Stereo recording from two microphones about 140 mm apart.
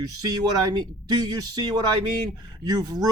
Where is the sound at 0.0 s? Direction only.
30° right (ahead or behind).